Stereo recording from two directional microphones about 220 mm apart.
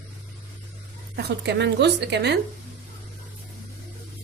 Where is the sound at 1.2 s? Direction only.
50° right (ahead or behind).